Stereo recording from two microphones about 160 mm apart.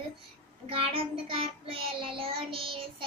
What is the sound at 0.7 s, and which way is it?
Child singing, 35° right (ahead or behind).